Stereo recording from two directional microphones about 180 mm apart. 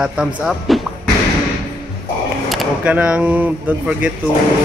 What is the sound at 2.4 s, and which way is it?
Speech, 5° right (ahead or behind).